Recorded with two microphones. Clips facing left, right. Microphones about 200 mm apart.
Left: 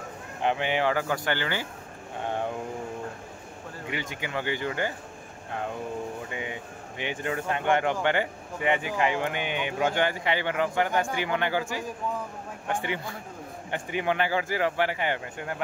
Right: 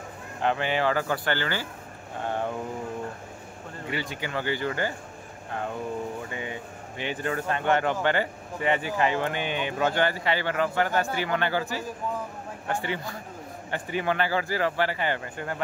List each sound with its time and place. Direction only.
0.4 s speech: 15° left (ahead or behind)
3.9 s speech: 15° left (ahead or behind)
6.3 s speech: 15° left (ahead or behind)